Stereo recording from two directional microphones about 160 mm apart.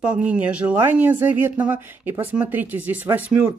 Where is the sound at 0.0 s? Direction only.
10° right (ahead or behind).